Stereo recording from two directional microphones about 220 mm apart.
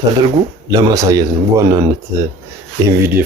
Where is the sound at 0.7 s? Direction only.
15° right (ahead or behind).